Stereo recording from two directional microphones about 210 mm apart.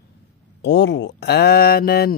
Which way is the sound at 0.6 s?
55° left (ahead or behind).